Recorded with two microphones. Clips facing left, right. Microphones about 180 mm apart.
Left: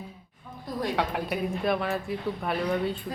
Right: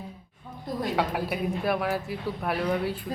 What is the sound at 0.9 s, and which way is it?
Speech, 5° right (ahead or behind).